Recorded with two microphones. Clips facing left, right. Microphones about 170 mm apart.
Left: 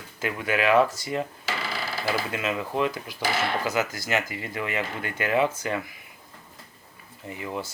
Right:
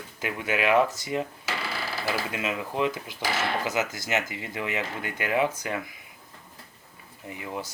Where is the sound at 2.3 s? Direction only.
15° right (ahead or behind).